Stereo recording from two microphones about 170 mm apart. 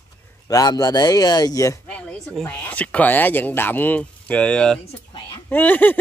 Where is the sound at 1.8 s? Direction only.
5° left (ahead or behind).